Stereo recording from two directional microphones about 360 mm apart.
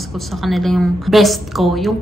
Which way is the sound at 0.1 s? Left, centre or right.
Centre.